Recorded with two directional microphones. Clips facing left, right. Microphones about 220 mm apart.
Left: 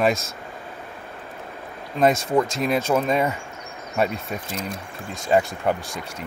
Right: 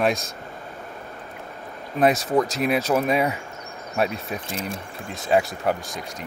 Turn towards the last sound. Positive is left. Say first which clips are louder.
# even
turn(degrees=0)  # may be behind; listen again after turning